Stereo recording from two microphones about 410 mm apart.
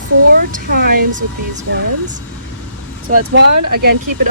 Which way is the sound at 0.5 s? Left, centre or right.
Right.